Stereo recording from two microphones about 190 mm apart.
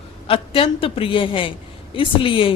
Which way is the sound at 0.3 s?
30° left (ahead or behind).